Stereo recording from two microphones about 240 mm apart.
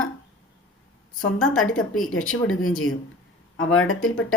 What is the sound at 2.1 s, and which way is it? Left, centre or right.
A woman's voice, left.